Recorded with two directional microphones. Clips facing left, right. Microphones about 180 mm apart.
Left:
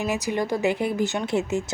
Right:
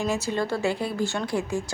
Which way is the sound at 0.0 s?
15° left (ahead or behind).